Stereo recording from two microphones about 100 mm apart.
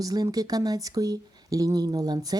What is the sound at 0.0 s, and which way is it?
Speech, 40° right (ahead or behind).